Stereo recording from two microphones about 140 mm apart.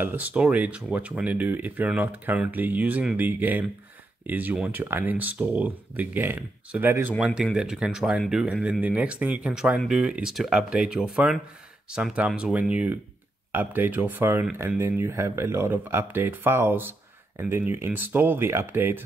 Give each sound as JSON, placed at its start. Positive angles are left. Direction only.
{"t": 0.0, "sound": "speech", "side_deg": -10}